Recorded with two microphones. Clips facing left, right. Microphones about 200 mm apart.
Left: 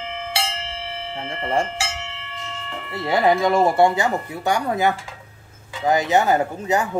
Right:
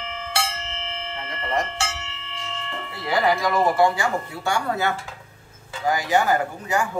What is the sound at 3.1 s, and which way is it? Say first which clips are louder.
Speech: left 4 dB; 25° left (ahead or behind).